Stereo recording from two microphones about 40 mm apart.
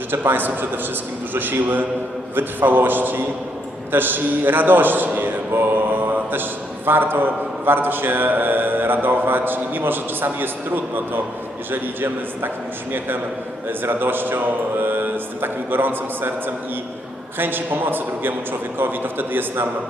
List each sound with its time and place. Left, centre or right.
0.1 s a man's voice: right
13.7 s a man's voice: right
17.3 s a man's voice: right